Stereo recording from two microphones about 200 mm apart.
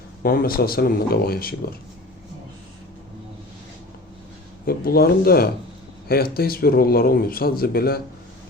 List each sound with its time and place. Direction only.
0.2 s speech: 45° left (ahead or behind)
4.6 s speech: 50° left (ahead or behind)